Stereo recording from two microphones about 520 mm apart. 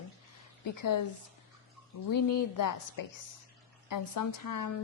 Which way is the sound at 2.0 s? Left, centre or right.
Left.